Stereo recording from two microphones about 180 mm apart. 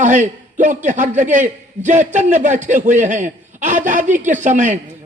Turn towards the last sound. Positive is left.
turn(degrees=-40)  # may be behind; listen again after turning